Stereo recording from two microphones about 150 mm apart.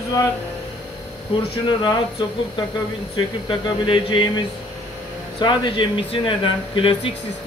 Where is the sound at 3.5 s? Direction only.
30° left (ahead or behind).